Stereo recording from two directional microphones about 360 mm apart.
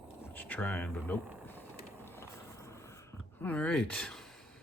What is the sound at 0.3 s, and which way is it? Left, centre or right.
Speech, centre.